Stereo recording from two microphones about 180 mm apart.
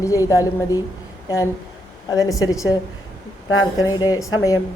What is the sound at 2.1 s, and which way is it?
A woman's voice, 20° left (ahead or behind).